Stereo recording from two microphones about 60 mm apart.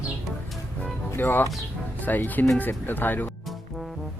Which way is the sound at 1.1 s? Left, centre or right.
Left.